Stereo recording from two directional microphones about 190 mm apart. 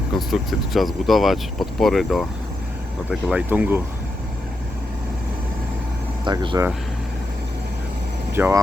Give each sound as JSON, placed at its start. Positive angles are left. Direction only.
{"t": 0.2, "sound": "speech", "side_deg": 0}
{"t": 6.2, "sound": "speech", "side_deg": -25}
{"t": 8.3, "sound": "speech", "side_deg": -10}